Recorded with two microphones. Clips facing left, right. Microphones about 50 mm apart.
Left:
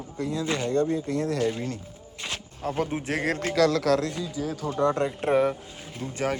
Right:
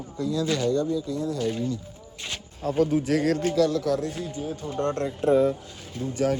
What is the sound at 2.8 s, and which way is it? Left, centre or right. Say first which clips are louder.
Speech: right 6 dB; left.